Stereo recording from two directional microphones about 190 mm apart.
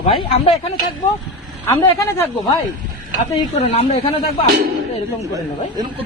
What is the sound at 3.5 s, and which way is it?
Speech, 35° left (ahead or behind).